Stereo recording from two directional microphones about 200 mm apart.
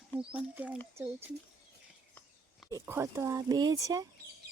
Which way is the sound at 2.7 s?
15° right (ahead or behind).